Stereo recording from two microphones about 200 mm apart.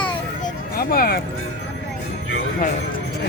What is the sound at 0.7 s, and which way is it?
Speech, 50° left (ahead or behind).